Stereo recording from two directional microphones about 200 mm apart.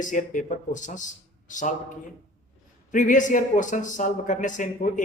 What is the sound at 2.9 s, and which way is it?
A man's voice, 40° left (ahead or behind).